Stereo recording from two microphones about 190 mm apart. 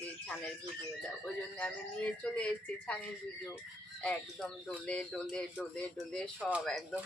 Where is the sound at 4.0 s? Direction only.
5° left (ahead or behind).